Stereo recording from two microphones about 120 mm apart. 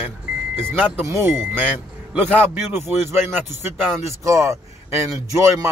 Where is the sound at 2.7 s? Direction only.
20° right (ahead or behind).